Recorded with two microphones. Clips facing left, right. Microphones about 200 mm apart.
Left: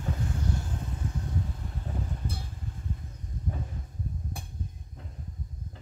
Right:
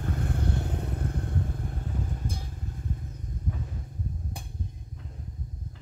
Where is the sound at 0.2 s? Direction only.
60° right (ahead or behind).